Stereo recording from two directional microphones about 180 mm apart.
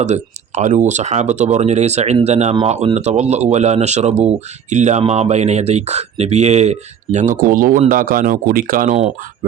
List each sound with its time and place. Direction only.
0.0 s speech: 40° right (ahead or behind)